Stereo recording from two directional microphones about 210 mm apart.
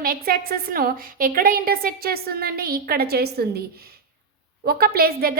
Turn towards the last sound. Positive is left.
turn(degrees=-45)  # may be behind; listen again after turning